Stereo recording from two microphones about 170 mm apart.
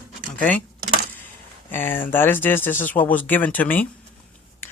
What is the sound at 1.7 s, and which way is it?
A woman's voice, 10° left (ahead or behind).